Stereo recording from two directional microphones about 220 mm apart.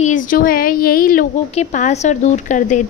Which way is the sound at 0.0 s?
35° left (ahead or behind).